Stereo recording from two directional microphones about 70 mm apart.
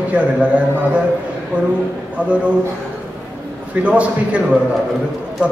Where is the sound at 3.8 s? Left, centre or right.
Centre.